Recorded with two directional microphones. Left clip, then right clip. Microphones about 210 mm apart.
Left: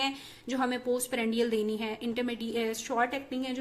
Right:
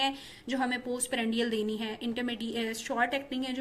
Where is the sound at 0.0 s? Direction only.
Centre (ahead or behind).